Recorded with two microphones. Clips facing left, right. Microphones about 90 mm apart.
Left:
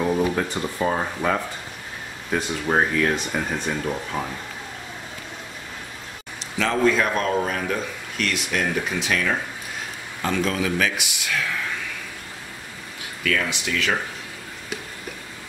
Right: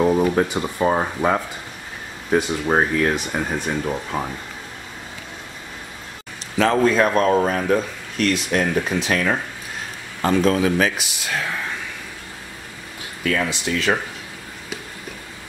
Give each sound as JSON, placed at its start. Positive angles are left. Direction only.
{"t": 0.0, "sound": "speech", "side_deg": -30}
{"t": 2.3, "sound": "speech", "side_deg": -10}
{"t": 6.6, "sound": "speech", "side_deg": -40}
{"t": 13.2, "sound": "speech", "side_deg": -35}